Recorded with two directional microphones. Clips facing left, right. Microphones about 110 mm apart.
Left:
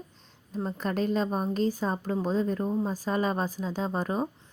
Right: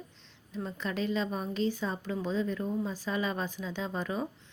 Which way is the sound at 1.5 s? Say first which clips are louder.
Left 4 dB; 40° left (ahead or behind).